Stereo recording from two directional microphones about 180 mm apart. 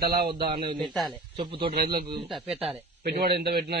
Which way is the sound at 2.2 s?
Centre (ahead or behind).